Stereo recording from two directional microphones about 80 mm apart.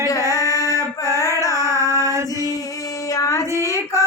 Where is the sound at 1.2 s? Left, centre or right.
Left.